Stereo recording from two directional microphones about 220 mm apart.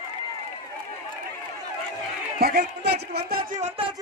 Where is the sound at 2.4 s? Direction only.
45° right (ahead or behind).